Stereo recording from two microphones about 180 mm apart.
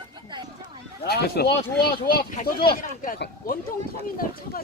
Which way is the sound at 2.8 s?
50° left (ahead or behind).